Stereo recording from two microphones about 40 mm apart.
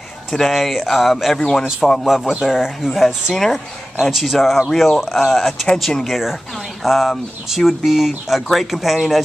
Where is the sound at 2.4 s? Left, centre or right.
Centre.